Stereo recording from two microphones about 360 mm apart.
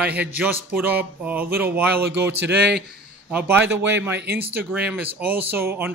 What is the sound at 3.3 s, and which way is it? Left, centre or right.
Speech, centre.